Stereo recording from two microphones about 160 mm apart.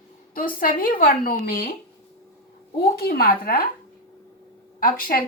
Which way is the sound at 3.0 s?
70° left (ahead or behind).